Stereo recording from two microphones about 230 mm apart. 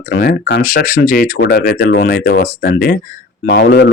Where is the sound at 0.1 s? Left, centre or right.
Left.